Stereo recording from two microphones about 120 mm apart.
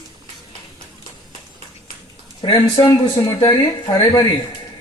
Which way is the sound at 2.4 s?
35° left (ahead or behind).